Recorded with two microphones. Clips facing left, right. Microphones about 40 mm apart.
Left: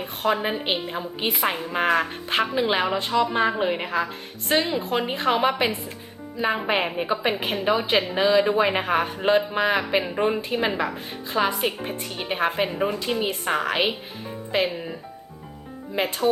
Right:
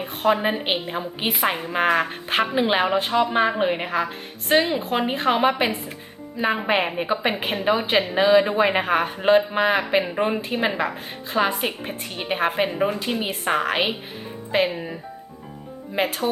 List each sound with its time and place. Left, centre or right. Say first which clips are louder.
0.0 s a woman's voice: right 3 dB; centre
16.0 s speech: even; centre